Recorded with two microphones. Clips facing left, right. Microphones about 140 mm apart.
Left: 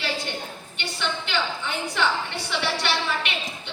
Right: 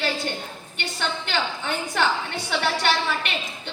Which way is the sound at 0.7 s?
45° right (ahead or behind).